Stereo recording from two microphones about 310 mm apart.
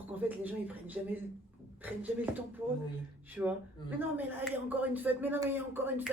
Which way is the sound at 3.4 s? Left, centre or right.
Centre.